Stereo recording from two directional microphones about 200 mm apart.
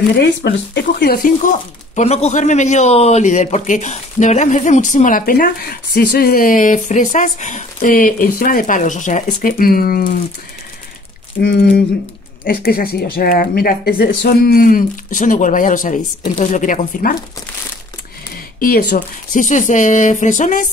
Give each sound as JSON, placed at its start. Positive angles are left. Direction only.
{"t": 0.1, "sound": "speech", "side_deg": 60}
{"t": 11.4, "sound": "speech", "side_deg": 50}
{"t": 18.6, "sound": "speech", "side_deg": 45}